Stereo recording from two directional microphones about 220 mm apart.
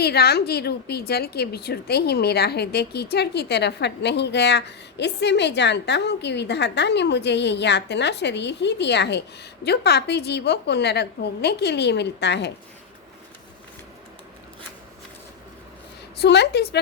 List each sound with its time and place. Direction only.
0.0 s a woman's voice: 45° left (ahead or behind)
16.2 s a woman's voice: 50° left (ahead or behind)